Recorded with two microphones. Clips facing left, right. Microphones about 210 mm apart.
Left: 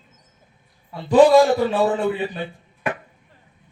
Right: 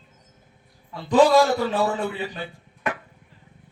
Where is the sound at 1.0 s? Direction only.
20° left (ahead or behind).